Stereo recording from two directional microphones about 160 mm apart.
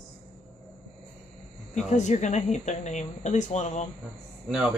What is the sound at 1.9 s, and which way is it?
A woman's voice, 45° left (ahead or behind).